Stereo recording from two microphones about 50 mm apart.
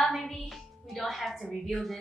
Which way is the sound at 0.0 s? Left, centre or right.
Centre.